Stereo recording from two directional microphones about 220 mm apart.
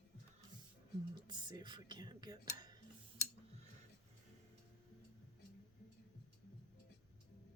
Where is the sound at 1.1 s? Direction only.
20° right (ahead or behind).